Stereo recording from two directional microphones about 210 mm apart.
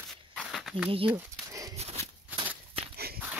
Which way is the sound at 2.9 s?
45° right (ahead or behind).